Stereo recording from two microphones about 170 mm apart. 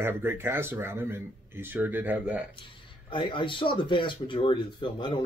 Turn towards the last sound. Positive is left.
turn(degrees=25)  # may be behind; listen again after turning